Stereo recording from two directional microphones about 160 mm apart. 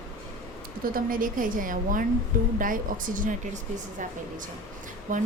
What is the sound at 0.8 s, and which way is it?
Speech, 60° right (ahead or behind).